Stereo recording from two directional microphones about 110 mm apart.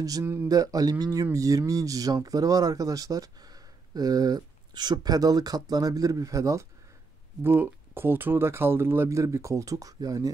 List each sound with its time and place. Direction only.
0.0 s speech: 30° right (ahead or behind)
0.5 s speech: 35° right (ahead or behind)